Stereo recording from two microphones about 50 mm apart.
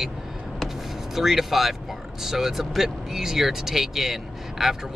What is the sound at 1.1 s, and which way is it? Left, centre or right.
Speech, centre.